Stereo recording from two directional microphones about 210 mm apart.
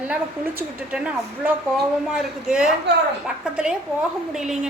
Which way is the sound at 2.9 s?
55° right (ahead or behind).